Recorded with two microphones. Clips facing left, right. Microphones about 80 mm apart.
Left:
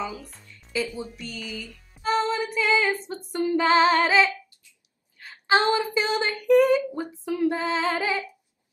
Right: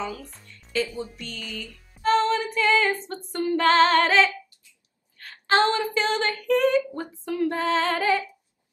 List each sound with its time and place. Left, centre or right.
0.0 s speech: centre
1.1 s music: centre
3.3 s a sound: centre